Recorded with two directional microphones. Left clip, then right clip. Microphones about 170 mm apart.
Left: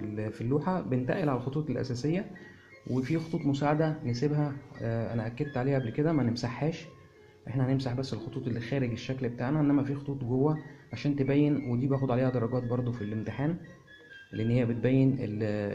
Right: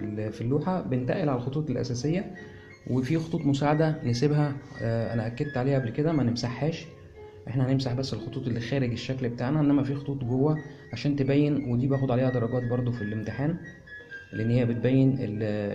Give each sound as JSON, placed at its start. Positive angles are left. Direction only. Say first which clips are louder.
{"t": 0.1, "sound": "speech", "louder": "right 2 dB", "side_deg": 20}
{"t": 2.9, "sound": "speech", "louder": "right 3 dB", "side_deg": 10}